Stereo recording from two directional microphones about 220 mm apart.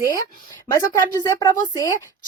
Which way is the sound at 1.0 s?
15° left (ahead or behind).